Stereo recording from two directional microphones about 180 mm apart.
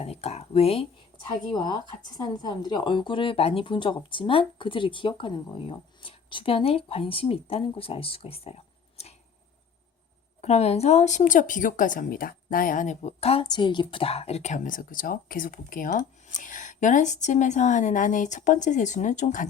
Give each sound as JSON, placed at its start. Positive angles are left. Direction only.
{"t": 0.0, "sound": "speech", "side_deg": 35}
{"t": 10.4, "sound": "a woman's voice", "side_deg": 35}